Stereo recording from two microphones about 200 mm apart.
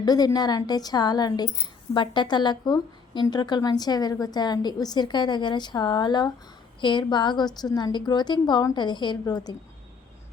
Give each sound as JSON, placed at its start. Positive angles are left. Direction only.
{"t": 0.0, "sound": "a woman's voice", "side_deg": 20}